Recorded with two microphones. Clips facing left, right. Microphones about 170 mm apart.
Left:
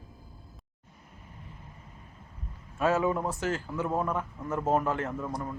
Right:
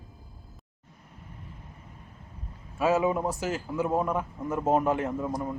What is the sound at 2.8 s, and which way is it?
Speech, 10° right (ahead or behind).